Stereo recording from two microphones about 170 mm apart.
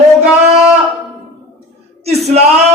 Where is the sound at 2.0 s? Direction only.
40° right (ahead or behind).